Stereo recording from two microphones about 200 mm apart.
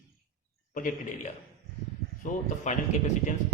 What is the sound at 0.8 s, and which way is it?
Speech, 40° left (ahead or behind).